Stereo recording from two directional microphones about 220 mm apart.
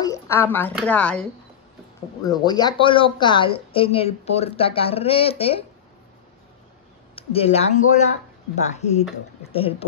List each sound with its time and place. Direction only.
0.0 s a sound: 15° left (ahead or behind)
0.7 s speech: 5° left (ahead or behind)
2.2 s speech: 20° left (ahead or behind)
7.2 s speech: 25° left (ahead or behind)